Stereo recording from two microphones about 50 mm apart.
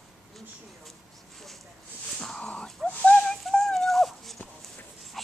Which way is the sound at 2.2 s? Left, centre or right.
Centre.